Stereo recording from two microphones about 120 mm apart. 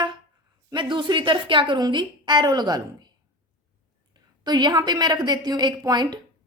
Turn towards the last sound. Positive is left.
turn(degrees=-35)  # may be behind; listen again after turning